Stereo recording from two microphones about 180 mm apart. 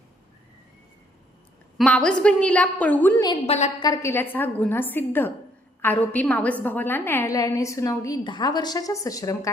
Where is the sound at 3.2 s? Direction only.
35° left (ahead or behind).